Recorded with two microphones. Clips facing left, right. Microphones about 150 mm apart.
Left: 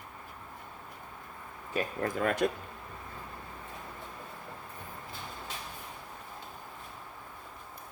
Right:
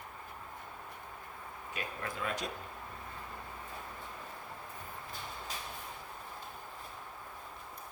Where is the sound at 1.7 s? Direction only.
40° left (ahead or behind).